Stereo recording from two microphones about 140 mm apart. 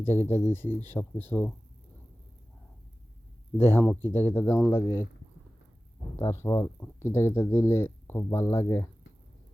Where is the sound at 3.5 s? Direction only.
15° left (ahead or behind).